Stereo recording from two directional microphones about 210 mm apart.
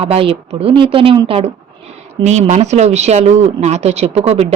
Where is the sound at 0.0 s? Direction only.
25° right (ahead or behind).